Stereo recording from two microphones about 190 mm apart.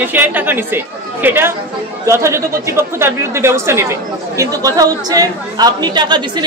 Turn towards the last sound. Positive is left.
turn(degrees=-25)  # may be behind; listen again after turning